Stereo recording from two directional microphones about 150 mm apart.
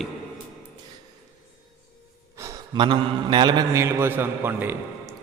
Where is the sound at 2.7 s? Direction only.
35° right (ahead or behind); by 4.7 s 15° right (ahead or behind).